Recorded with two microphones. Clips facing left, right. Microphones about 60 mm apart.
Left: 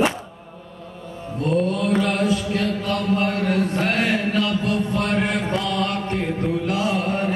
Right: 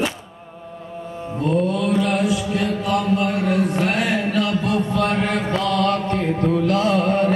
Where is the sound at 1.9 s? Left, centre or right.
Left.